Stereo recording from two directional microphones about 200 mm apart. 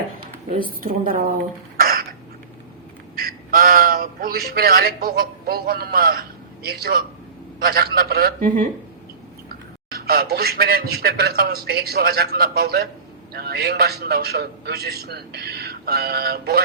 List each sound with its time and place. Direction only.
0.8 s a man's voice: 45° right (ahead or behind)
1.8 s a sound: 45° right (ahead or behind)
3.2 s a man's voice: 45° right (ahead or behind)
9.9 s a man's voice: 50° right (ahead or behind)